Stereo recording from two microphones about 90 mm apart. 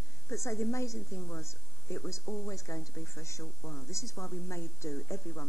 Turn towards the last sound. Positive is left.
turn(degrees=35)  # may be behind; listen again after turning